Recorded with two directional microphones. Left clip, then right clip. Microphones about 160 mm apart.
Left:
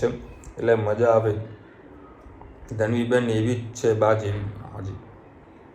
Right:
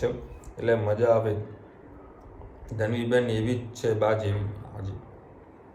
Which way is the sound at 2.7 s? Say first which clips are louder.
Left 3 dB; 10° left (ahead or behind).